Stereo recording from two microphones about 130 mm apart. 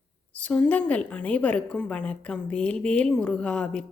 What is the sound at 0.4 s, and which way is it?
A woman's voice, 10° left (ahead or behind).